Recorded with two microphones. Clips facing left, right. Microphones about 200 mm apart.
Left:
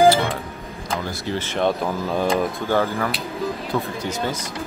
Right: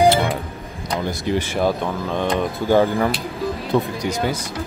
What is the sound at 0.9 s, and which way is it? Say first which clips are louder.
Speech: right 4 dB; 15° right (ahead or behind).